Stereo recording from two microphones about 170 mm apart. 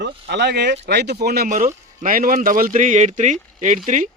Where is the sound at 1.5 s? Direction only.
55° right (ahead or behind).